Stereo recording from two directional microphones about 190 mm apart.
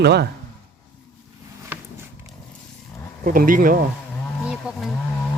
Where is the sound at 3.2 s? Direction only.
45° right (ahead or behind).